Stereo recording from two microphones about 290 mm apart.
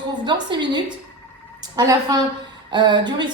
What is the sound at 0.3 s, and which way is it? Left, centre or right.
A woman's voice, centre.